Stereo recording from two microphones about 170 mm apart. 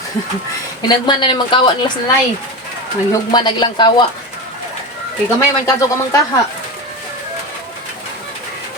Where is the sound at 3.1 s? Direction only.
25° left (ahead or behind).